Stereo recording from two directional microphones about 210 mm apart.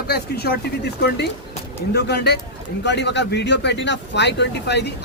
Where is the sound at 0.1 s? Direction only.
50° left (ahead or behind).